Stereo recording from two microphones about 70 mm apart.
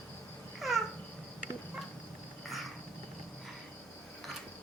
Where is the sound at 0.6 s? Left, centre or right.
Centre.